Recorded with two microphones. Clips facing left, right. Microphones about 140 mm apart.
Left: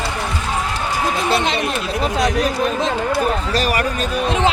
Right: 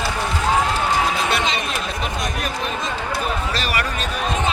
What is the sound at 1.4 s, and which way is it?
Chatter, 60° left (ahead or behind).